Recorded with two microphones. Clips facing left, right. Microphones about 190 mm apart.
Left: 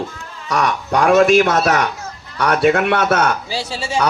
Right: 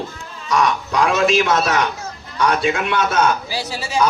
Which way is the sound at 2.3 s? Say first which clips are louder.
Left 4 dB; 65° left (ahead or behind).